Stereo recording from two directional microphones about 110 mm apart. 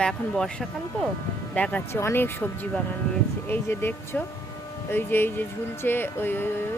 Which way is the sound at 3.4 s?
20° left (ahead or behind).